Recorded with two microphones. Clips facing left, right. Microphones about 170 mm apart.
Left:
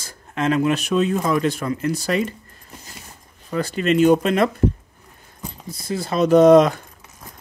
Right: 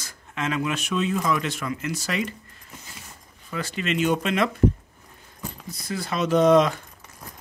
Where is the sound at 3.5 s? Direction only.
40° left (ahead or behind).